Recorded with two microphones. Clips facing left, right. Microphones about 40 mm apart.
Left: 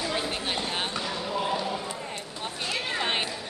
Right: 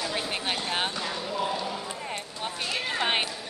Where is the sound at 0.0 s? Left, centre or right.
Centre.